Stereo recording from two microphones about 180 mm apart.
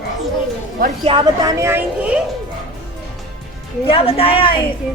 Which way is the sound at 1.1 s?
25° right (ahead or behind).